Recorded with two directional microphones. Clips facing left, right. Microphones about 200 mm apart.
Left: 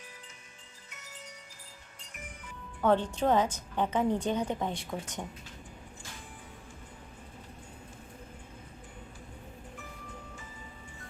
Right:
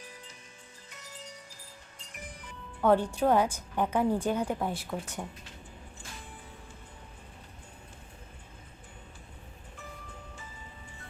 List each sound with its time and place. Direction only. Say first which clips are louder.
0.9 s music: right 2 dB; 35° right (ahead or behind)
2.1 s music: right 1 dB; 35° right (ahead or behind)
2.8 s a woman's voice: right 2 dB; 10° right (ahead or behind)